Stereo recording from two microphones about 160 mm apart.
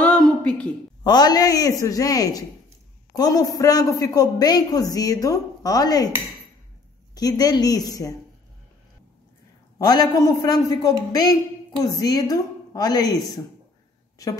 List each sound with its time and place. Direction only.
0.0 s a sound: 10° left (ahead or behind)
1.0 s a man's voice: 25° left (ahead or behind)
7.2 s a man's voice: 25° left (ahead or behind)
9.8 s a man's voice: 25° left (ahead or behind)